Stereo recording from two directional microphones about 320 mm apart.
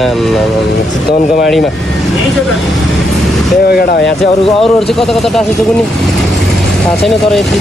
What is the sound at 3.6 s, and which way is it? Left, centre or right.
Speech, left.